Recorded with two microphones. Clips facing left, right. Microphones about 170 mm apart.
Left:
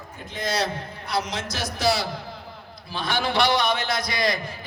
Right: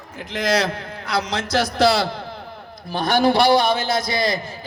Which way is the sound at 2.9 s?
45° right (ahead or behind).